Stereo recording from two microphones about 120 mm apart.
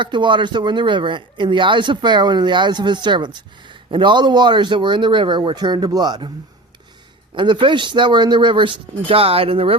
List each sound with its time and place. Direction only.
0.0 s speech: 40° right (ahead or behind)
7.3 s speech: 40° right (ahead or behind)